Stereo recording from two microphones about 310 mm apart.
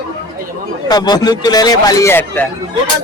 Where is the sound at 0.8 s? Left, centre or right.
Centre.